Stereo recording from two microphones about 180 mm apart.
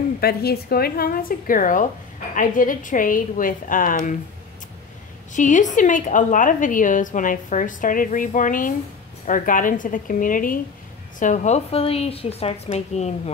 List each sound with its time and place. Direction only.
0.2 s a woman's voice: 60° left (ahead or behind)
5.3 s a woman's voice: 45° left (ahead or behind)